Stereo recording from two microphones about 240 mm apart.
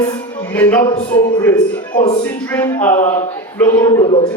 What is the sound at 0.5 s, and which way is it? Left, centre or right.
Speech, centre.